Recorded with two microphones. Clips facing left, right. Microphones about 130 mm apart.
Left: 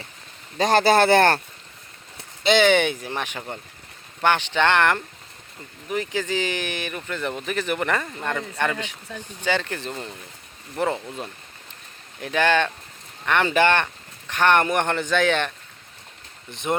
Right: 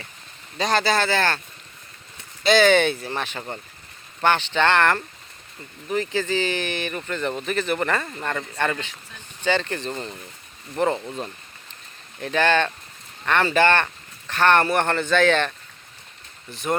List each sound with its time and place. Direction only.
0.6 s speech: 50° left (ahead or behind)
2.4 s speech: 20° left (ahead or behind)